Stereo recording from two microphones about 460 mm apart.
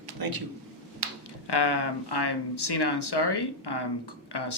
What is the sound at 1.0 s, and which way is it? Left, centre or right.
Finger snapping, right.